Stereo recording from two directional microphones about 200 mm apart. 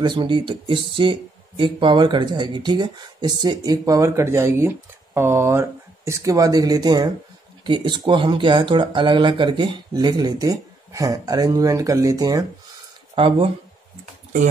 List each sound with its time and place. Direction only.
0.0 s speech: 25° right (ahead or behind)